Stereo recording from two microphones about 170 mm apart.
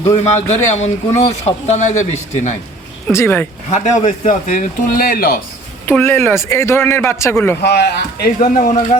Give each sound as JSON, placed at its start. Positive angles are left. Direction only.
{"t": 0.1, "sound": "a man's voice", "side_deg": 40}
{"t": 3.1, "sound": "a man's voice", "side_deg": 15}
{"t": 3.7, "sound": "speech", "side_deg": 45}
{"t": 5.8, "sound": "a man's voice", "side_deg": 15}
{"t": 7.6, "sound": "speech", "side_deg": 75}